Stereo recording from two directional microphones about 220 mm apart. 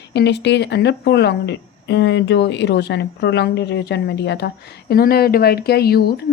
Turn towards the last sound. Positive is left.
turn(degrees=45)  # may be behind; listen again after turning